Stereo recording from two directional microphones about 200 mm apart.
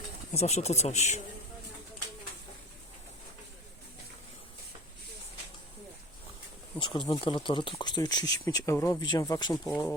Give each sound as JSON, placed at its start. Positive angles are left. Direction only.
{"t": 0.3, "sound": "speech", "side_deg": 35}
{"t": 6.7, "sound": "speech", "side_deg": 25}